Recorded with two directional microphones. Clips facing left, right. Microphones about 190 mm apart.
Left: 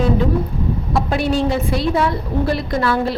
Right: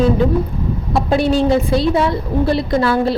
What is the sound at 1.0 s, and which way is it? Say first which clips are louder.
A woman's voice: right 5 dB; 30° right (ahead or behind).